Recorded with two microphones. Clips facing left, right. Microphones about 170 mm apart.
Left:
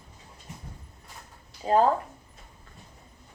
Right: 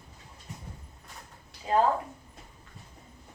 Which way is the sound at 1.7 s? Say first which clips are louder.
Left 3 dB; 35° left (ahead or behind).